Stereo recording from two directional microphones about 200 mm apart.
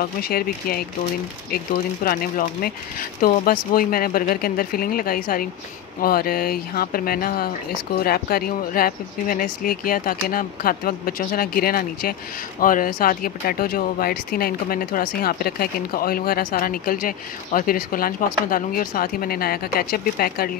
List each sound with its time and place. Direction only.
0.0 s speech: 50° left (ahead or behind)
2.0 s speech: 45° left (ahead or behind)